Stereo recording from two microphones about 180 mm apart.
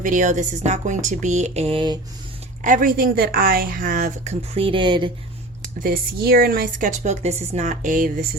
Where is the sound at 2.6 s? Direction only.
45° right (ahead or behind); by 5.1 s 25° right (ahead or behind).